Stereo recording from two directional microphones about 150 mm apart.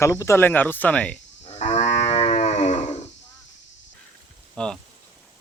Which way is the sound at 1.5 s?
50° left (ahead or behind).